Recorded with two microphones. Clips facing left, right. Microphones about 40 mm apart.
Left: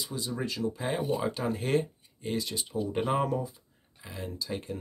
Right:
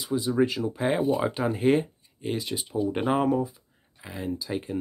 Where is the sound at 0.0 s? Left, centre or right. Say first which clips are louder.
Right 10 dB; right.